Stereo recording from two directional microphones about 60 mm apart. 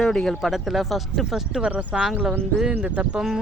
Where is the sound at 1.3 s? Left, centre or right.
Centre.